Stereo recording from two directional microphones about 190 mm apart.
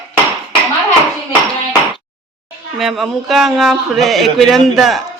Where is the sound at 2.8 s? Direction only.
Centre (ahead or behind).